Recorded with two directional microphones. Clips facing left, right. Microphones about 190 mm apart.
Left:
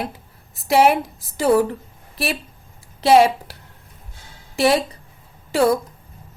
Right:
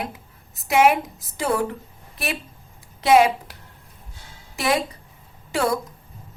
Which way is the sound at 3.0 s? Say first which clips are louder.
Left 2 dB; 30° left (ahead or behind).